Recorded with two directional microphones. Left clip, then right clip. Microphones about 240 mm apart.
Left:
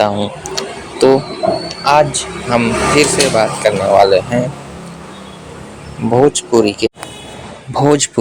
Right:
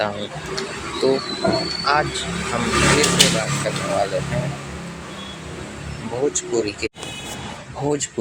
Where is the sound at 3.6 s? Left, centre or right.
Left.